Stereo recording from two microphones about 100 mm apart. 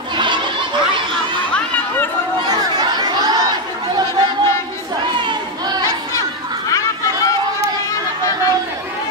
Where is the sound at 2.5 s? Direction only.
45° right (ahead or behind).